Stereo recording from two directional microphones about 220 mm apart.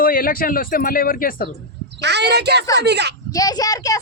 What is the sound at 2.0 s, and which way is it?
Speech, 50° right (ahead or behind).